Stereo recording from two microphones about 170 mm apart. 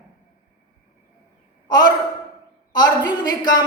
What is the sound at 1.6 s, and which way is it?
A man's voice, 25° left (ahead or behind).